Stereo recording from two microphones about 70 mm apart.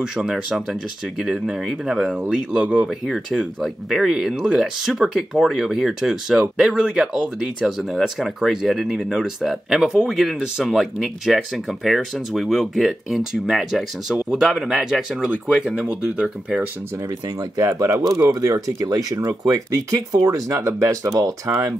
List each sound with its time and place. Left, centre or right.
0.1 s speech: centre
3.3 s speech: centre
17.6 s speech: right